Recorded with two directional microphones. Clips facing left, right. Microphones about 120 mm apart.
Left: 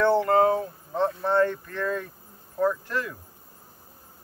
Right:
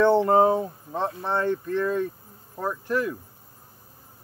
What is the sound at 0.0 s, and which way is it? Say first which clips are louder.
Speech: right 2 dB; 20° right (ahead or behind).